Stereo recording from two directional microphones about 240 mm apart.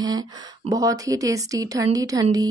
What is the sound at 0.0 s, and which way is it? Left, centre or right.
A woman's voice, centre.